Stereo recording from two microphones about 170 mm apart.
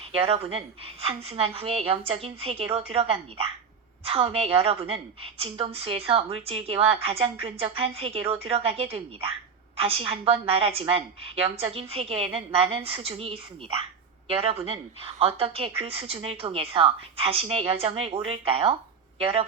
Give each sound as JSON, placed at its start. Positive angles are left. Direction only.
{"t": 0.0, "sound": "a woman's voice", "side_deg": -35}